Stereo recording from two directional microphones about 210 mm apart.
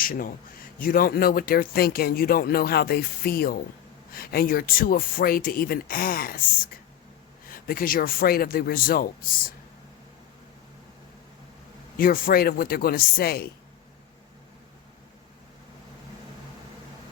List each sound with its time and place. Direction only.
0.0 s a man's voice: 45° left (ahead or behind)
7.4 s speech: 45° left (ahead or behind)
11.9 s speech: 40° left (ahead or behind)